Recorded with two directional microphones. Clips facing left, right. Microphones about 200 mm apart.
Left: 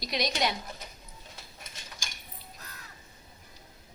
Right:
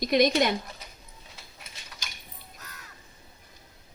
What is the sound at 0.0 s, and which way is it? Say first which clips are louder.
Speech: right 8 dB; 50° right (ahead or behind).